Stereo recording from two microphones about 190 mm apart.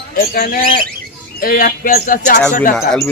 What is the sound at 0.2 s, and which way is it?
Speech, 50° left (ahead or behind).